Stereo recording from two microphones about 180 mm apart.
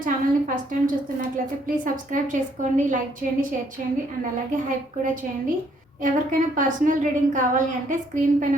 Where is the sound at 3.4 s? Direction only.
50° right (ahead or behind).